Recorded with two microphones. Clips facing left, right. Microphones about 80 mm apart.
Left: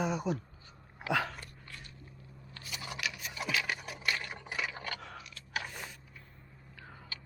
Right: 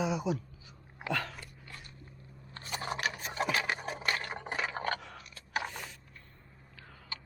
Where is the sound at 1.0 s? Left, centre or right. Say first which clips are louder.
Left 3 dB; centre.